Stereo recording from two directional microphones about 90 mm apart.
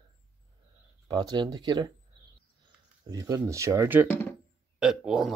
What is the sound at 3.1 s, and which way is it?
Speech, 45° right (ahead or behind).